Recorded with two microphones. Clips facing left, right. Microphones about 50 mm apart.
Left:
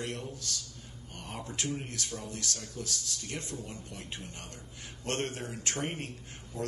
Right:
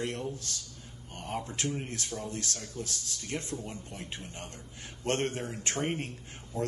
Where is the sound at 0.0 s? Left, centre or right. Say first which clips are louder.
Right 3 dB; right.